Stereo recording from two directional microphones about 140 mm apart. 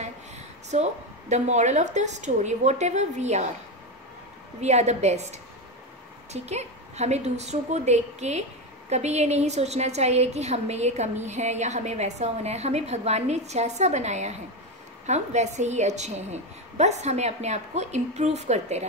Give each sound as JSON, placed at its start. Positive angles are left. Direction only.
{"t": 0.7, "sound": "a woman's voice", "side_deg": -55}
{"t": 4.6, "sound": "a woman's voice", "side_deg": -55}